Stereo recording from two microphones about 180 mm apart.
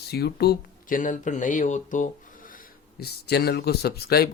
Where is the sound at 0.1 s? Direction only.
60° left (ahead or behind).